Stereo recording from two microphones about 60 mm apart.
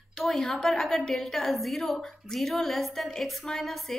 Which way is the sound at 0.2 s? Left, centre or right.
Centre.